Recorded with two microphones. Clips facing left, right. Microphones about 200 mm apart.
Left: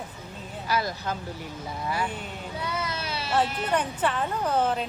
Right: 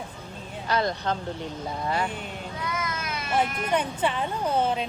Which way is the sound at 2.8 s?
30° left (ahead or behind).